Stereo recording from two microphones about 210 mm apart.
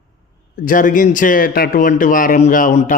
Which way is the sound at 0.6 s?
40° left (ahead or behind).